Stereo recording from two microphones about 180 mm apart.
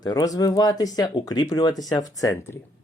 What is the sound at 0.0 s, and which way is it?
Speech, 20° left (ahead or behind).